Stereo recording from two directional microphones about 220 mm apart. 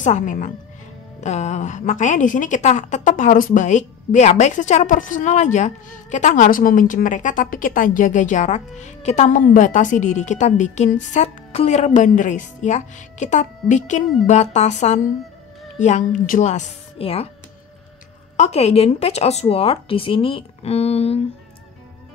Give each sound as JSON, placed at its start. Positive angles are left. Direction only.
{"t": 0.0, "sound": "a woman's voice", "side_deg": 35}
{"t": 18.3, "sound": "speech", "side_deg": 30}